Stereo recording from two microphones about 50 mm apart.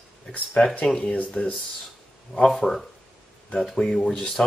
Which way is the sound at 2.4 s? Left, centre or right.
Centre.